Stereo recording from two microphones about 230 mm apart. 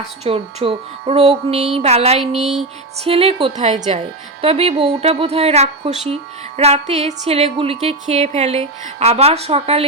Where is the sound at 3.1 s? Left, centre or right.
Right.